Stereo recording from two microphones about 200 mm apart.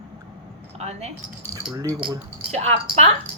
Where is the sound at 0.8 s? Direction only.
35° right (ahead or behind).